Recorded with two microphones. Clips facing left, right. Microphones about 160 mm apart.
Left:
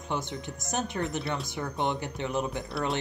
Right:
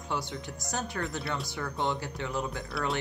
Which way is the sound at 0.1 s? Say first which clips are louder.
Left 2 dB; 20° left (ahead or behind).